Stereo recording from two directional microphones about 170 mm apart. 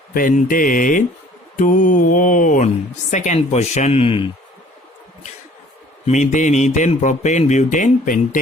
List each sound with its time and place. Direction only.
0.1 s speech: 55° left (ahead or behind); by 4.3 s 30° left (ahead or behind)
6.1 s speech: 45° left (ahead or behind)